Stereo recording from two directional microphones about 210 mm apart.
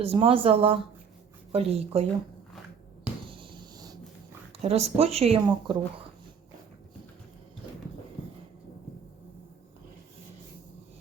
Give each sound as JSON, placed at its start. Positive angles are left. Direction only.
{"t": 0.0, "sound": "speech", "side_deg": -25}
{"t": 3.2, "sound": "a sound", "side_deg": -25}
{"t": 4.6, "sound": "speech", "side_deg": -30}